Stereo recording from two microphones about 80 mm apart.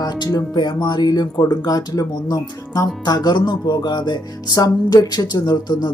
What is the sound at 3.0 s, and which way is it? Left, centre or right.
Speech, left.